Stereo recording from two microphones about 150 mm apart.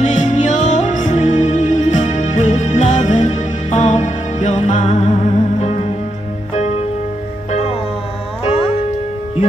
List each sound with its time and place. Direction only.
0.0 s music: 55° left (ahead or behind)